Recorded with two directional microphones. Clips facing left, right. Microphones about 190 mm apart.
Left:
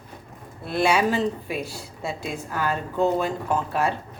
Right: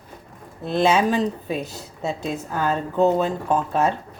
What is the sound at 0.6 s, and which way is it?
Speech, 20° right (ahead or behind).